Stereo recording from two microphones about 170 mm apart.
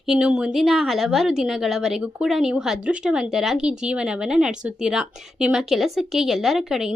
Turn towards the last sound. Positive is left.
turn(degrees=0)  # may be behind; listen again after turning